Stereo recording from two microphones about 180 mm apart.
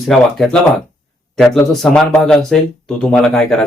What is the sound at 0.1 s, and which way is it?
Speech, centre (ahead or behind).